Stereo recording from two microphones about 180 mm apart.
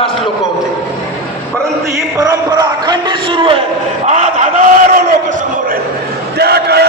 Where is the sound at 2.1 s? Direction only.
20° right (ahead or behind).